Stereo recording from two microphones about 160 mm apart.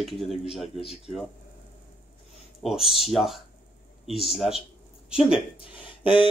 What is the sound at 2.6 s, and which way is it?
A man's voice, centre (ahead or behind).